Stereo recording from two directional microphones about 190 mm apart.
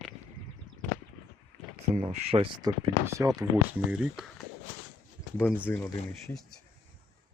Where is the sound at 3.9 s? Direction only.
5° right (ahead or behind).